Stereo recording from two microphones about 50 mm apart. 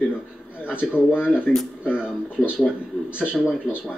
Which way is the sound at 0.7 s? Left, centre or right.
Left.